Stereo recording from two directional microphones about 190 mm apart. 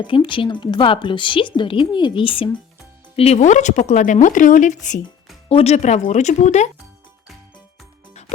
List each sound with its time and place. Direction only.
0.0 s a woman's voice: 25° left (ahead or behind)